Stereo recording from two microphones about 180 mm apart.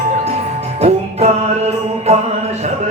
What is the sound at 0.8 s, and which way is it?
Music, 35° right (ahead or behind).